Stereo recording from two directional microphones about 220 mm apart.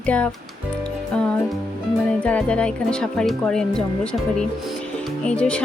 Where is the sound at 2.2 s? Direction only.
5° left (ahead or behind).